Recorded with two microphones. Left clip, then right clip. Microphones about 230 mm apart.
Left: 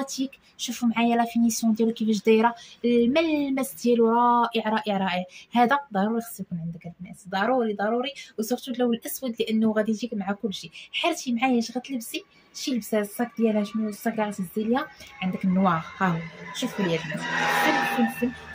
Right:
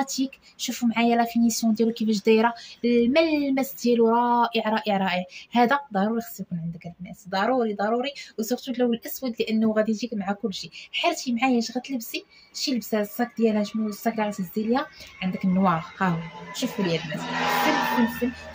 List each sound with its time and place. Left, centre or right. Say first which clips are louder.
0.0 s speech: right 3 dB; centre
17.0 s speech: left 1 dB; left